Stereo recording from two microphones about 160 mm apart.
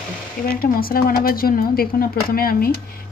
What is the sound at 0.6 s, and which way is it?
Speech, 65° left (ahead or behind).